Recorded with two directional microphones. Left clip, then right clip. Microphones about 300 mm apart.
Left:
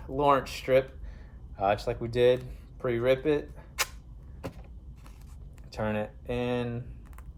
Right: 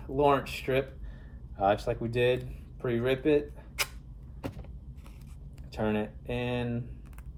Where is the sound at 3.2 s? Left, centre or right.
Centre.